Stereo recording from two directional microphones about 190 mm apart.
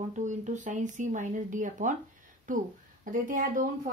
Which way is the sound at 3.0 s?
45° right (ahead or behind).